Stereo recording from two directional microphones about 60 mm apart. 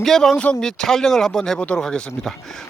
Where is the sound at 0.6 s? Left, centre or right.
Centre.